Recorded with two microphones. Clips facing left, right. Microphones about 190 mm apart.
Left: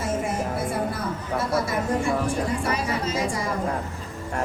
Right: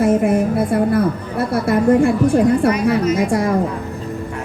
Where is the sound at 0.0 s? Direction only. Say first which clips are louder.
Right 12 dB; 60° right (ahead or behind).